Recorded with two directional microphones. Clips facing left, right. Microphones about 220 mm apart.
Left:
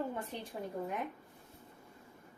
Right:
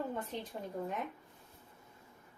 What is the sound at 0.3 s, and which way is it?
Speech, 10° left (ahead or behind).